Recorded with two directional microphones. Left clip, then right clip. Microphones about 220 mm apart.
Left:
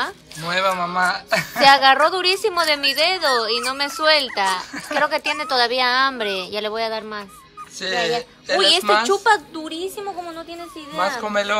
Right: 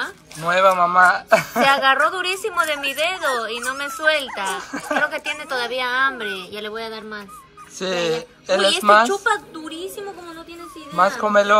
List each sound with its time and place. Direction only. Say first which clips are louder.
0.4 s a woman's voice: right 5 dB; 5° left (ahead or behind)
1.6 s a woman's voice: left 7 dB; 35° left (ahead or behind)
4.6 s a woman's voice: right 1 dB; 5° left (ahead or behind)
5.0 s a woman's voice: left 3 dB; 30° left (ahead or behind)
7.8 s a woman's voice: left 1 dB; 5° left (ahead or behind)
9.1 s a woman's voice: left 4 dB; 25° left (ahead or behind)
11.0 s a woman's voice: right 5 dB; 5° left (ahead or behind)